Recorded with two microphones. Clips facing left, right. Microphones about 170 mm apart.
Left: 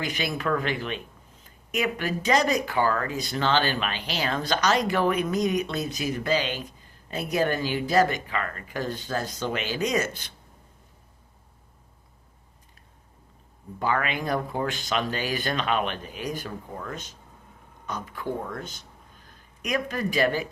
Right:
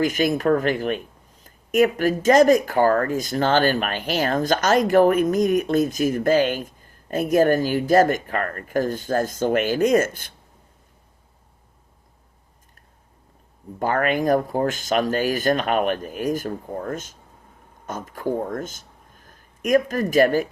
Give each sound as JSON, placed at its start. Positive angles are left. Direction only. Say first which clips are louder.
{"t": 0.0, "sound": "speech", "louder": "right 9 dB", "side_deg": -45}
{"t": 13.7, "sound": "speech", "louder": "right 6 dB", "side_deg": -50}